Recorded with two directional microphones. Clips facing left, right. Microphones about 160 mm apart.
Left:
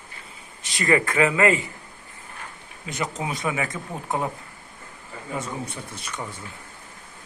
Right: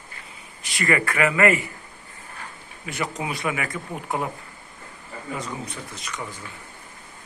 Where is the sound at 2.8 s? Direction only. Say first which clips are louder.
Even; 20° left (ahead or behind).